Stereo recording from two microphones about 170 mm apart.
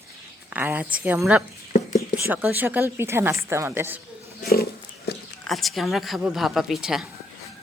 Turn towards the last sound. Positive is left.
turn(degrees=0)  # may be behind; listen again after turning